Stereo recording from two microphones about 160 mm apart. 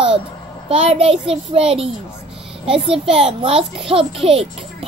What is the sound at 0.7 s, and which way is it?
Speech, 35° right (ahead or behind).